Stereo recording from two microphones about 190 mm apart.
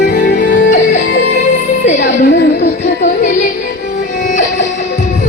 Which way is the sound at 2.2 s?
60° left (ahead or behind).